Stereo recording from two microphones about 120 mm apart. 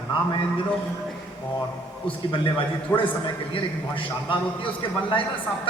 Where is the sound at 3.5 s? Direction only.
45° left (ahead or behind).